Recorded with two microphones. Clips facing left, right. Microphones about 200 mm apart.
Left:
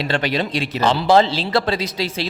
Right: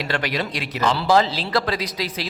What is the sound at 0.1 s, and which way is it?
Speech, 25° left (ahead or behind).